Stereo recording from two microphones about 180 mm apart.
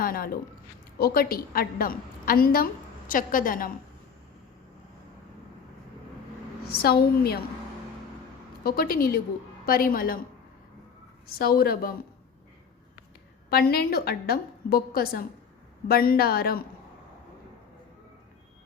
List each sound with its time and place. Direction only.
0.0 s a woman's voice: 55° left (ahead or behind)
6.7 s a woman's voice: 60° left (ahead or behind)
8.6 s a woman's voice: 55° left (ahead or behind)
11.3 s a woman's voice: 55° left (ahead or behind)
13.5 s a woman's voice: 60° left (ahead or behind)